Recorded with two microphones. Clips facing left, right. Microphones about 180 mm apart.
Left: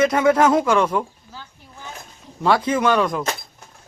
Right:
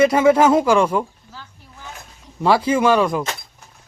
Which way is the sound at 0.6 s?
30° right (ahead or behind).